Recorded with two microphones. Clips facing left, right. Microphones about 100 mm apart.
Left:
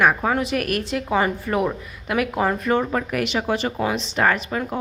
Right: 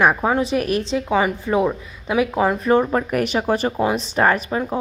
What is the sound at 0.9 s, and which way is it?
Speech, 10° right (ahead or behind).